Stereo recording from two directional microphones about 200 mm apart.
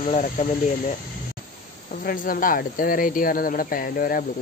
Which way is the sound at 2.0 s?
45° left (ahead or behind).